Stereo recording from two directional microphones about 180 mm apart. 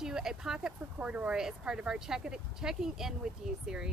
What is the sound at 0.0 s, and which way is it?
Speech, 5° right (ahead or behind).